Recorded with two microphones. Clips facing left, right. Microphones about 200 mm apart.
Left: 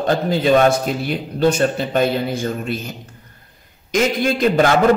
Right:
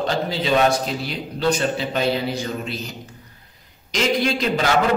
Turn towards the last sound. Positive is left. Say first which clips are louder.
# left 5 dB
turn(degrees=50)  # may be behind; listen again after turning